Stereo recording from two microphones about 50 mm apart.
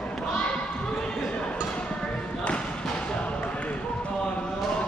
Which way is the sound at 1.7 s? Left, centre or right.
Left.